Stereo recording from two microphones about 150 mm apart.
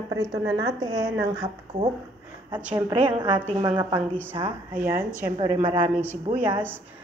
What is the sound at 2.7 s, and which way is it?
Speech, 35° right (ahead or behind).